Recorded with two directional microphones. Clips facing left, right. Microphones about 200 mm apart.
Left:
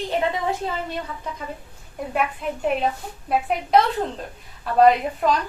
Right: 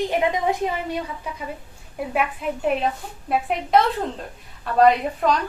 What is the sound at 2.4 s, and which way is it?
A woman's voice, 5° right (ahead or behind).